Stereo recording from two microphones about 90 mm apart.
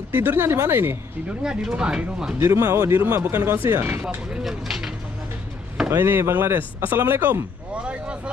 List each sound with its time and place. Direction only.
0.1 s speech: 25° right (ahead or behind)
1.4 s speech: 10° right (ahead or behind)
2.3 s speech: 35° right (ahead or behind)
4.0 s speech: 10° right (ahead or behind)
5.9 s speech: 25° right (ahead or behind)